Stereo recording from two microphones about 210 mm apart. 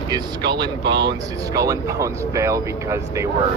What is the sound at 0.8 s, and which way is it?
Speech, 55° right (ahead or behind).